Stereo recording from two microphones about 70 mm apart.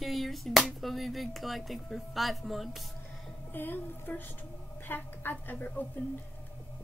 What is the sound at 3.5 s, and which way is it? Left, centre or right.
A woman's voice, left.